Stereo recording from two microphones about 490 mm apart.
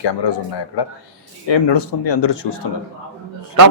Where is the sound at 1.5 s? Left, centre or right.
Left.